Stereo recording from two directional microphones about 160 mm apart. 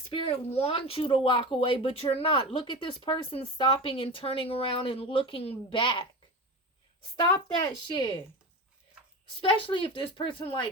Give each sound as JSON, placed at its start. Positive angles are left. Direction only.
{"t": 0.1, "sound": "speech", "side_deg": 40}
{"t": 7.2, "sound": "speech", "side_deg": 30}
{"t": 9.4, "sound": "speech", "side_deg": 35}